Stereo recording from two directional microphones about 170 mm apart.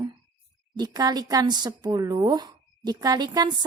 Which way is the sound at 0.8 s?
25° right (ahead or behind).